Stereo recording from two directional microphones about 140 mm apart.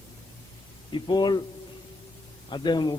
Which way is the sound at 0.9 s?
30° left (ahead or behind).